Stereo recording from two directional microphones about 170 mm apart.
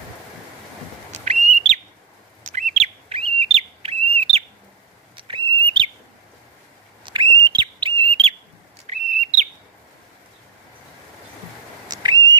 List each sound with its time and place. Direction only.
1.1 s bird: 40° right (ahead or behind)
5.1 s whistle: 30° right (ahead or behind)
7.3 s bird: 25° right (ahead or behind); by 9.5 s 40° right (ahead or behind)
11.9 s a sound: 25° right (ahead or behind)